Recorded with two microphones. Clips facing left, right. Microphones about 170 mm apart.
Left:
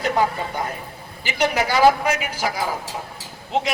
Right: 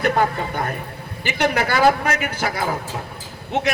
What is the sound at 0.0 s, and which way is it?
A man's voice, 60° right (ahead or behind).